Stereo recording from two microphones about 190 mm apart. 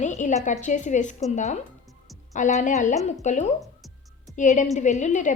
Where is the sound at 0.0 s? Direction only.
40° left (ahead or behind).